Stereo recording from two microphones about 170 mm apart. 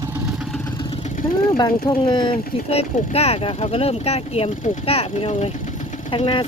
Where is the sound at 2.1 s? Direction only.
30° left (ahead or behind).